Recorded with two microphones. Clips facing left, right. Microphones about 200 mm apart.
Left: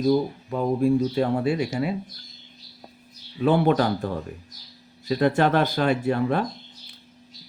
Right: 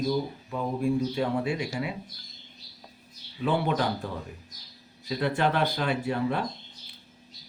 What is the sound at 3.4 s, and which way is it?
Speech, 50° left (ahead or behind).